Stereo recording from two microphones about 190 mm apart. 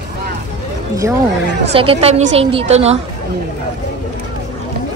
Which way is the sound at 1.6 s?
30° right (ahead or behind).